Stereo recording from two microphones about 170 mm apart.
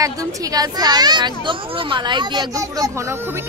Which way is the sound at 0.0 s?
20° right (ahead or behind).